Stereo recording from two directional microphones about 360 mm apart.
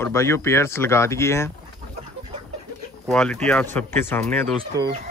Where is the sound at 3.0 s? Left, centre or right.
Centre.